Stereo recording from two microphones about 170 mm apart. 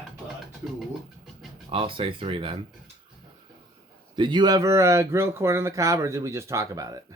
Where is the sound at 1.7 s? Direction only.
30° right (ahead or behind).